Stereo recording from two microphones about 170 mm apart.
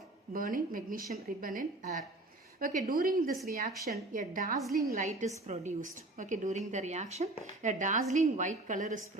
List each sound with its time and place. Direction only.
0.3 s speech: 55° right (ahead or behind)